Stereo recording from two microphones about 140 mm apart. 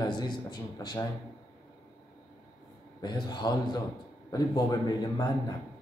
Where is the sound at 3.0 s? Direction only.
30° left (ahead or behind).